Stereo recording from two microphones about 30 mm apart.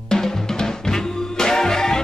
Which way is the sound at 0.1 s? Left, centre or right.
Centre.